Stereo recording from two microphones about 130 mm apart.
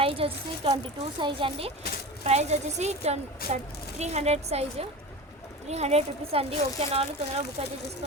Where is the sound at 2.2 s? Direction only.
55° right (ahead or behind).